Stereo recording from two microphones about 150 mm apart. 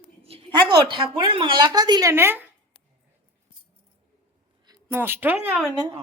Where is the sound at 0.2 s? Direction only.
40° right (ahead or behind); by 2.5 s 15° right (ahead or behind).